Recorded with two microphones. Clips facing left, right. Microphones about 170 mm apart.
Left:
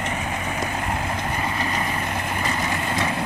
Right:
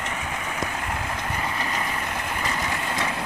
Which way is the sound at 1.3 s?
15° left (ahead or behind).